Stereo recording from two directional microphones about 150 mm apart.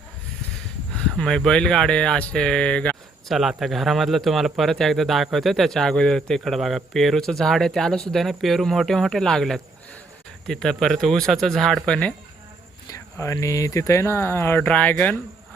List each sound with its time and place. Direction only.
0.9 s speech: 5° left (ahead or behind)
12.9 s speech: 20° left (ahead or behind)